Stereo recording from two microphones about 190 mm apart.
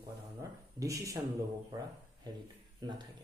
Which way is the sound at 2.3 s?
20° right (ahead or behind).